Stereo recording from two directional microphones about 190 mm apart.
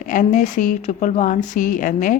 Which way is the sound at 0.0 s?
45° left (ahead or behind).